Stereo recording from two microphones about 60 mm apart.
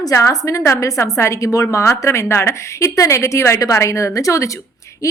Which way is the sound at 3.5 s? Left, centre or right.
Left.